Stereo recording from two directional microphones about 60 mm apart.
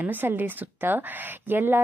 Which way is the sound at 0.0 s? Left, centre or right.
Right.